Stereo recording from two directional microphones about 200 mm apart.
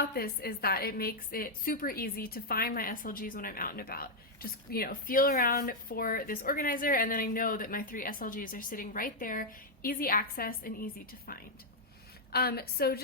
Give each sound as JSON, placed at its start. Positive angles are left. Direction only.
{"t": 0.0, "sound": "a woman's voice", "side_deg": 50}